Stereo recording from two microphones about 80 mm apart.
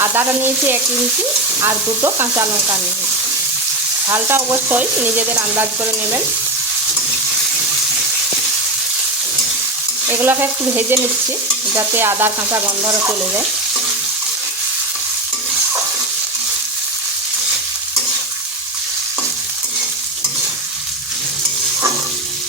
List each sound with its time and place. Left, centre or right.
0.0 s stir: right
1.6 s frying: right
4.1 s stir: right
10.1 s stir: right